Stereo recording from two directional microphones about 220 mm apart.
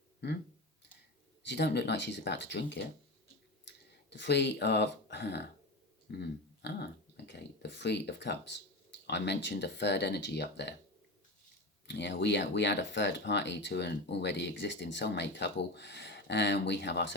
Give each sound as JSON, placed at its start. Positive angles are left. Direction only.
{"t": 0.2, "sound": "speech", "side_deg": 50}
{"t": 1.5, "sound": "speech", "side_deg": 50}
{"t": 11.9, "sound": "speech", "side_deg": 50}